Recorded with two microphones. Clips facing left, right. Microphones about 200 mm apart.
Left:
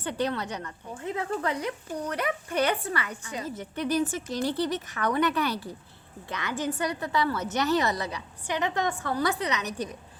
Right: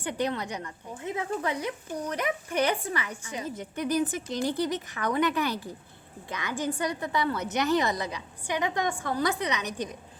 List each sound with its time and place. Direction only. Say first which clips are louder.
0.0 s speech: left 1 dB; 15° right (ahead or behind)